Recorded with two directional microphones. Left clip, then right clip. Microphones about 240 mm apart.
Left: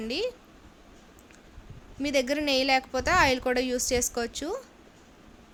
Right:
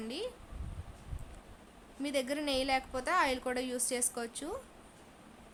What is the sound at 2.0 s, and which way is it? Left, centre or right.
A woman's voice, centre.